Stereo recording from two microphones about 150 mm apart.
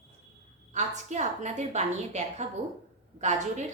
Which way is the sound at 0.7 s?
50° right (ahead or behind).